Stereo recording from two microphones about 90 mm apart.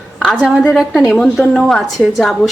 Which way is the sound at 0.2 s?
10° right (ahead or behind).